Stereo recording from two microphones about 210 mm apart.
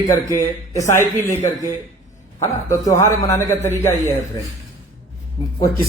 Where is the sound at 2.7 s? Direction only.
15° left (ahead or behind).